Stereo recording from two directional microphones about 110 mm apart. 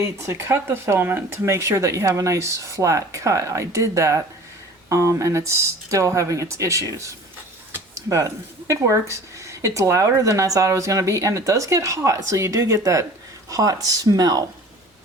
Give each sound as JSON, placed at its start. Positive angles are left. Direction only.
{"t": 0.0, "sound": "speech", "side_deg": -25}